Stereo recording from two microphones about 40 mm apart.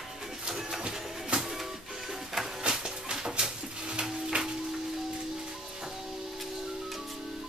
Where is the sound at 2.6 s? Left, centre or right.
Right.